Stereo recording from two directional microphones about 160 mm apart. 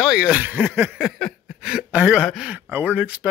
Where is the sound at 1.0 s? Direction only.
Centre (ahead or behind).